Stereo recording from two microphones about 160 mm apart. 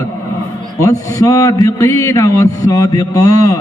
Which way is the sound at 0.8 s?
20° left (ahead or behind).